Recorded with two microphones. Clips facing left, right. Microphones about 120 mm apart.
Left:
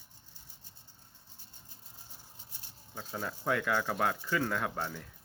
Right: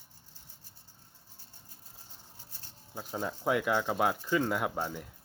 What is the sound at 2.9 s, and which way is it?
Speech, 15° right (ahead or behind).